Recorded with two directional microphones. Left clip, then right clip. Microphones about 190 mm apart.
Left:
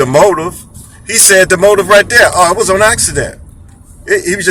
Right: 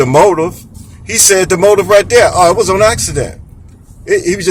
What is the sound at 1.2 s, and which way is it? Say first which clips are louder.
Speech: left 2 dB; 15° right (ahead or behind).